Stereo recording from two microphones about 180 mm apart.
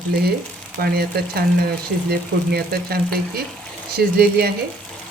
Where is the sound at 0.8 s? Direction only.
60° right (ahead or behind).